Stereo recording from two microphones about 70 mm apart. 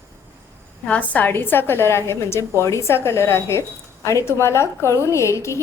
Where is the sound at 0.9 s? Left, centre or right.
Left.